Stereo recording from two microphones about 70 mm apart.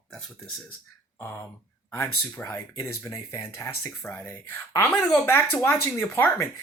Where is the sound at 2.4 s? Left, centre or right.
Left.